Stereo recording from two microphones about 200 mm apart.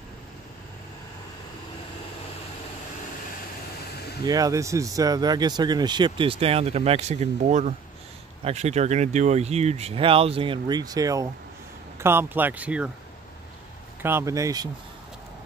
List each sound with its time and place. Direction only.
4.3 s speech: 15° right (ahead or behind)
14.0 s speech: 15° right (ahead or behind)